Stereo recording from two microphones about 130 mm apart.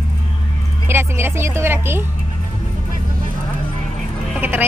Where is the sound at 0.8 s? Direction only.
20° right (ahead or behind).